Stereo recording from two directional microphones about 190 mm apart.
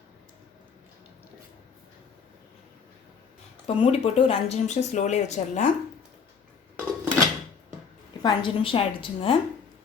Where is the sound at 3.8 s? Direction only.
30° left (ahead or behind).